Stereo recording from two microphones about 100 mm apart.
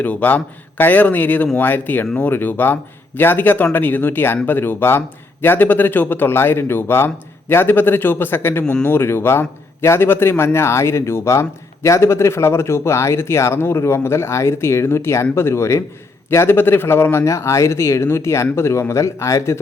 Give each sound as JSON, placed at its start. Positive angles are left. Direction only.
{"t": 0.0, "sound": "a man's voice", "side_deg": 15}
{"t": 8.6, "sound": "a man's voice", "side_deg": 10}
{"t": 8.9, "sound": "a man's voice", "side_deg": 25}